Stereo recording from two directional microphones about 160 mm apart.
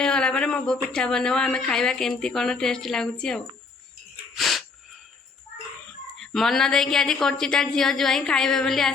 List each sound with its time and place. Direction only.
0.0 s speech: 5° left (ahead or behind)
4.4 s a sound: centre (ahead or behind)
6.1 s speech: centre (ahead or behind)